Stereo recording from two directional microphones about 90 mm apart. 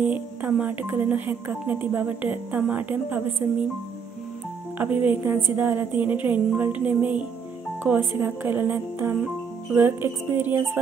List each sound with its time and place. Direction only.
0.0 s speech: 20° right (ahead or behind)
4.7 s speech: 20° right (ahead or behind)